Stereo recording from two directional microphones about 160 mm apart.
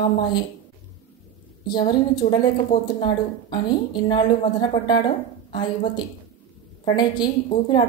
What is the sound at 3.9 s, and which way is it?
A woman's voice, 30° left (ahead or behind).